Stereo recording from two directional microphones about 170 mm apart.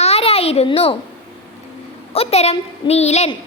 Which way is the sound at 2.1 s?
35° left (ahead or behind).